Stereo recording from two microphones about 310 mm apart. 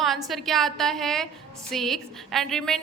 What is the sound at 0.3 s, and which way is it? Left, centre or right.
A woman's voice, centre.